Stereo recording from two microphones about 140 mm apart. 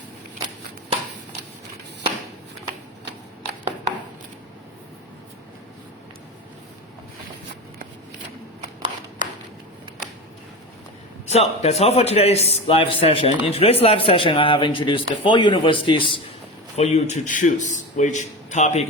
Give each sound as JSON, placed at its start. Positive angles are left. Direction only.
{"t": 11.3, "sound": "a man's voice", "side_deg": 50}
{"t": 16.7, "sound": "a man's voice", "side_deg": 50}